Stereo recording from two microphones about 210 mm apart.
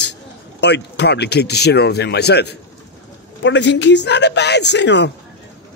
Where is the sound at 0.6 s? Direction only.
55° left (ahead or behind).